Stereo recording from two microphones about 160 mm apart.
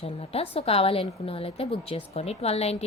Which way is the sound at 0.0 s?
40° left (ahead or behind).